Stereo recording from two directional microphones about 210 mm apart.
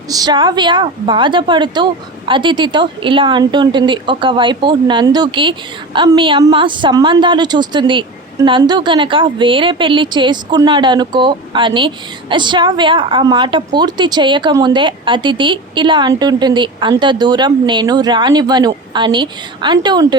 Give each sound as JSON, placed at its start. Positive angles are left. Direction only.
{"t": 0.1, "sound": "a woman's voice", "side_deg": -20}